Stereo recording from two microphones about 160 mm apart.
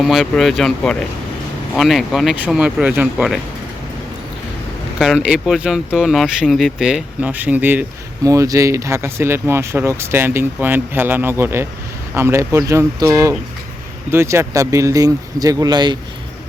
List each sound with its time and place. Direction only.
0.0 s speech: centre (ahead or behind)
4.9 s speech: 5° right (ahead or behind); by 16.0 s 25° right (ahead or behind)